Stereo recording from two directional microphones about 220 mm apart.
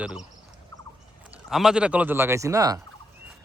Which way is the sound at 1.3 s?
Centre (ahead or behind).